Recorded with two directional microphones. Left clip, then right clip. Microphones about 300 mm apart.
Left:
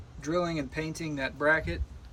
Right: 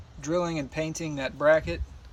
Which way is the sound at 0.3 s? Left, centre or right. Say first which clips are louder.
Right 2 dB; centre.